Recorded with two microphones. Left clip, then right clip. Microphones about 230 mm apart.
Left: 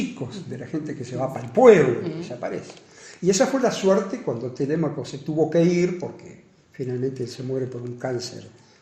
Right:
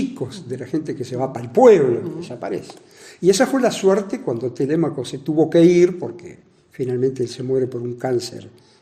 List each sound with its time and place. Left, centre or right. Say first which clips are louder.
0.3 s speech: right 6 dB; right